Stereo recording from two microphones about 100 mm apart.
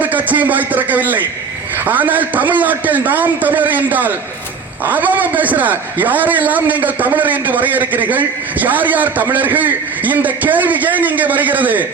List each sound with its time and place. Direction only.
0.0 s a man's voice: 15° right (ahead or behind)